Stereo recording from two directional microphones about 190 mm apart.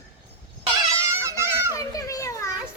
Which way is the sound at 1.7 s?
15° left (ahead or behind).